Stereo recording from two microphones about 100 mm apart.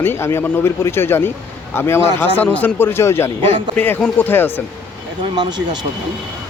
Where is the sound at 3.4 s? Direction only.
60° right (ahead or behind).